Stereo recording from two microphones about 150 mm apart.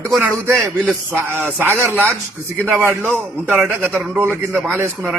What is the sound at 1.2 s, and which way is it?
A man's voice, 15° right (ahead or behind).